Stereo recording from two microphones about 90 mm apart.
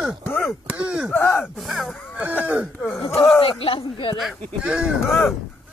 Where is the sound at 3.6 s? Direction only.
75° left (ahead or behind).